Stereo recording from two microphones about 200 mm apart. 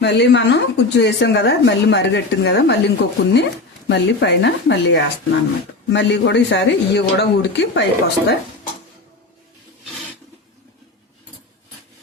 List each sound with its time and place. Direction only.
0.0 s a woman's voice: 60° left (ahead or behind)